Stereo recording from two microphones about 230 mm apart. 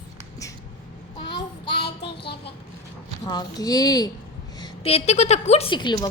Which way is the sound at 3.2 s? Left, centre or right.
Centre.